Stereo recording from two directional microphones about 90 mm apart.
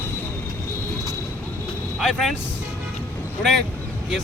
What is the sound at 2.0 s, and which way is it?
Speech, centre (ahead or behind).